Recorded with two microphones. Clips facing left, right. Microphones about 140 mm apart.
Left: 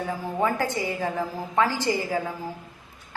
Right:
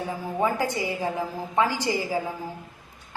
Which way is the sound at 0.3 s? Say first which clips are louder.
Even; 15° right (ahead or behind).